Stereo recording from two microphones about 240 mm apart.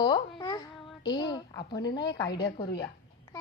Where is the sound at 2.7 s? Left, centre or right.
Left.